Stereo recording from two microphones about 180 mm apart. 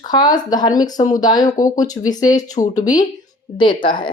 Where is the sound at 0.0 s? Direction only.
25° left (ahead or behind).